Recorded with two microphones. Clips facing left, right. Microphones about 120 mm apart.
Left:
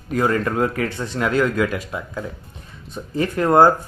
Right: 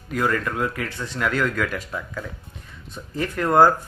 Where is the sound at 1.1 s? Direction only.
20° left (ahead or behind).